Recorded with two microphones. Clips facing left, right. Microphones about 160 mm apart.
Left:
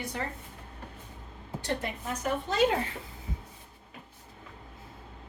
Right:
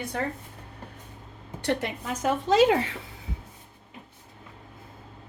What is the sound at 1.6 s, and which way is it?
A woman's voice, 75° right (ahead or behind).